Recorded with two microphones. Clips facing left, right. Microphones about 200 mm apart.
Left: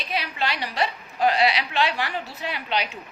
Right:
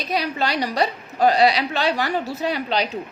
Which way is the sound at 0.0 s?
40° right (ahead or behind).